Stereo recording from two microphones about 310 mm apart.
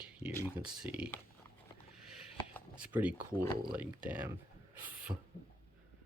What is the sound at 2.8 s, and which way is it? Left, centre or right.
Speech, centre.